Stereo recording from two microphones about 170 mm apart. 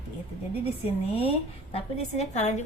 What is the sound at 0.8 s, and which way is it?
A woman's voice, 35° left (ahead or behind).